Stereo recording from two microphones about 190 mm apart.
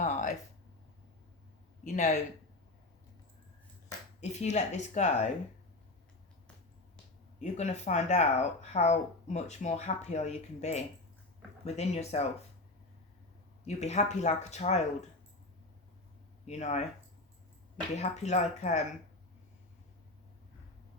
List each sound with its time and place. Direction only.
0.0 s a sound: 40° left (ahead or behind)
1.8 s speech: 40° left (ahead or behind)
4.2 s speech: 35° left (ahead or behind)
7.3 s speech: 35° left (ahead or behind)
13.7 s speech: 35° left (ahead or behind)
16.5 s speech: 35° left (ahead or behind)
17.9 s speech: 35° left (ahead or behind)